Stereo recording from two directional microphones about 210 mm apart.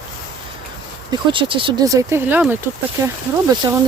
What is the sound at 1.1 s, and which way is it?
Speech, 25° right (ahead or behind).